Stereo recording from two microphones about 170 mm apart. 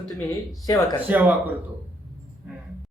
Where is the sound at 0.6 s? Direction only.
20° left (ahead or behind).